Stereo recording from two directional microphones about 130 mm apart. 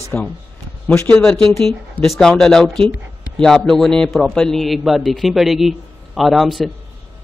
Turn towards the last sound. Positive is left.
turn(degrees=0)  # may be behind; listen again after turning